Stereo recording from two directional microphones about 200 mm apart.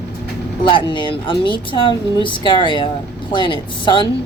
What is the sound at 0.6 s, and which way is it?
A woman's voice, 25° left (ahead or behind).